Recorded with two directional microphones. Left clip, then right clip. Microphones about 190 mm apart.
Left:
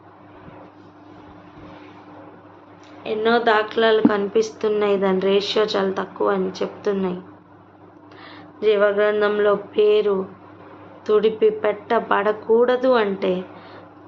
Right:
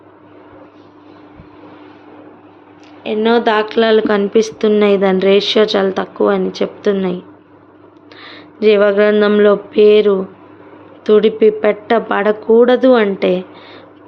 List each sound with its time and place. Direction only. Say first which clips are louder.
3.0 s speech: right 5 dB; 45° right (ahead or behind)
8.2 s a sound: right 8 dB; 50° right (ahead or behind)
11.0 s speech: right 7 dB; 45° right (ahead or behind)